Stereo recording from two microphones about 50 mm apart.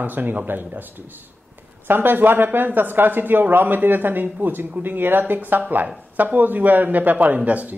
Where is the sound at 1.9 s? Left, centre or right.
Right.